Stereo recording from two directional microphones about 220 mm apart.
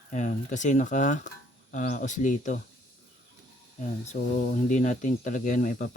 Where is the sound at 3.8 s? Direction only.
30° left (ahead or behind).